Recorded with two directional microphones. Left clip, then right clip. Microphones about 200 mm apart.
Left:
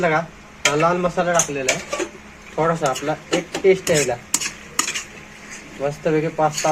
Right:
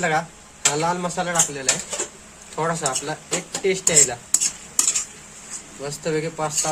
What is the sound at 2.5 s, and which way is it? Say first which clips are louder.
Speech: left 4 dB; 20° right (ahead or behind).